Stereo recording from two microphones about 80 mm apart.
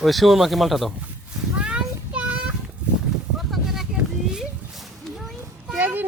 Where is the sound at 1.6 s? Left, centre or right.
Centre.